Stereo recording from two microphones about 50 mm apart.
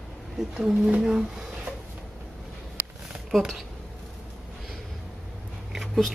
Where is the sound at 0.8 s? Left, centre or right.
Centre.